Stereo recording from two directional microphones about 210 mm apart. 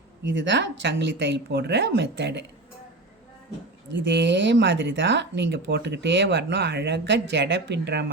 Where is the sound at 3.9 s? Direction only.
60° right (ahead or behind).